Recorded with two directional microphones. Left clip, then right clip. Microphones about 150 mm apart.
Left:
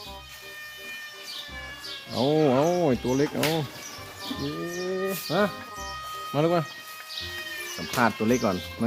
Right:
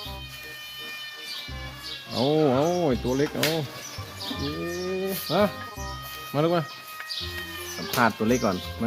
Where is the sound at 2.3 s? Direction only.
15° left (ahead or behind).